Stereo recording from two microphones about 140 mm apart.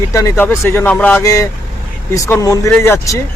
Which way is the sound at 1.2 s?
20° left (ahead or behind).